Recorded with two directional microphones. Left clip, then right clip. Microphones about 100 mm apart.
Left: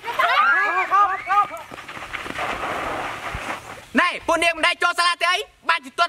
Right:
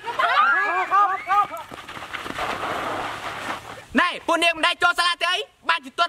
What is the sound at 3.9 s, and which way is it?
Speech, 5° right (ahead or behind).